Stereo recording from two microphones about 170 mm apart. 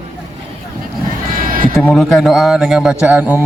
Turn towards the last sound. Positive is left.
turn(degrees=-10)  # may be behind; listen again after turning